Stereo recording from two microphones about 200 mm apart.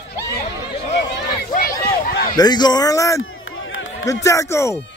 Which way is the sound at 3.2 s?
80° left.